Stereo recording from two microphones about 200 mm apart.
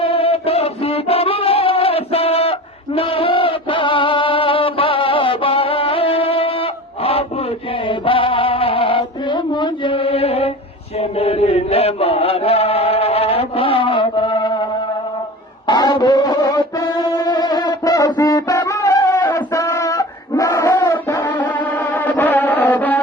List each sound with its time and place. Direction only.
0.0 s music: 30° left (ahead or behind)
10.9 s chant: 30° left (ahead or behind)
15.6 s music: 20° left (ahead or behind)